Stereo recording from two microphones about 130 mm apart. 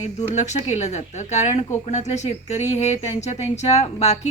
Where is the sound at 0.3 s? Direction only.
60° left (ahead or behind).